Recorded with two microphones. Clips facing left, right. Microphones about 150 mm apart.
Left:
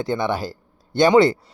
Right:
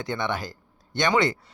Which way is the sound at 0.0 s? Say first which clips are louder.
Left 6 dB; 30° left (ahead or behind).